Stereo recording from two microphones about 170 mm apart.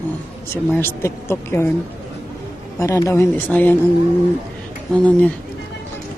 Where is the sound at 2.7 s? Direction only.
15° left (ahead or behind).